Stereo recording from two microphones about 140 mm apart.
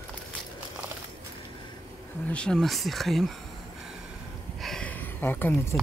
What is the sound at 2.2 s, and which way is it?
Speech, 5° left (ahead or behind).